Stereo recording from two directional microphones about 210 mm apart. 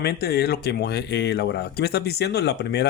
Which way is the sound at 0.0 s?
50° left (ahead or behind).